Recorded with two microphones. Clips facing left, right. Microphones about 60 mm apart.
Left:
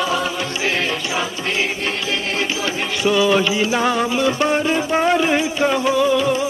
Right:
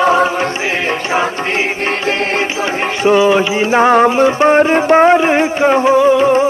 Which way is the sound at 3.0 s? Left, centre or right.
Right.